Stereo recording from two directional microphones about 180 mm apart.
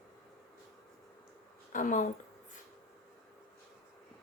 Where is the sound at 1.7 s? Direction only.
45° left (ahead or behind).